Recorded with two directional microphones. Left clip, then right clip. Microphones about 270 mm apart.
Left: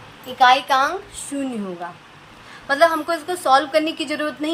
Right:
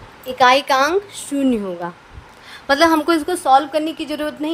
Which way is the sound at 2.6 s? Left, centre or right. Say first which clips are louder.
Right 3 dB; right.